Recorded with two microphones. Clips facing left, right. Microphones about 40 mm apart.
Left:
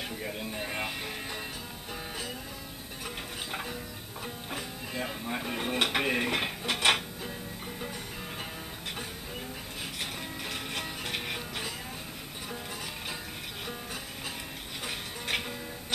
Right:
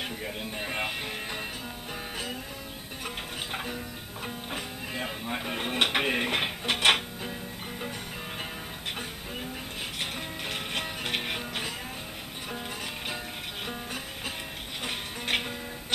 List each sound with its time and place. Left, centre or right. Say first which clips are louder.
0.2 s music: right 1 dB; centre
3.5 s music: right 2 dB; centre
9.9 s music: right 3 dB; right
14.8 s music: right 3 dB; right